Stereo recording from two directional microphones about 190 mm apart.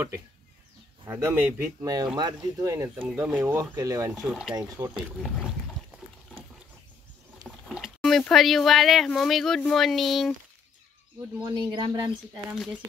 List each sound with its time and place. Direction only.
1.0 s speech: 10° right (ahead or behind)
4.2 s speech: 5° right (ahead or behind)
4.6 s speech: 15° right (ahead or behind)
4.9 s speech: 5° right (ahead or behind)
7.4 s speech: 5° right (ahead or behind)
11.5 s speech: 25° right (ahead or behind)
12.4 s speech: centre (ahead or behind)